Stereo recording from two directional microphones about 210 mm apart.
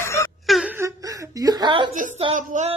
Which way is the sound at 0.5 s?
Centre (ahead or behind).